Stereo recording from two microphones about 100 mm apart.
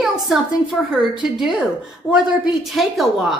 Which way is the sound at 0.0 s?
5° right (ahead or behind).